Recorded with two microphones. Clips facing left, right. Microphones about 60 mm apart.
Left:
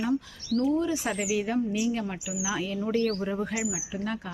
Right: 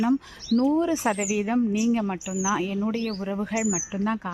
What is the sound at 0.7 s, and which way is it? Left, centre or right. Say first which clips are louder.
Speech: right 4 dB; right.